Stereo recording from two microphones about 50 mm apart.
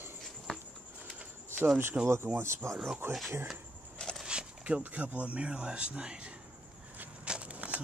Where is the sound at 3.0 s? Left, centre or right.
Right.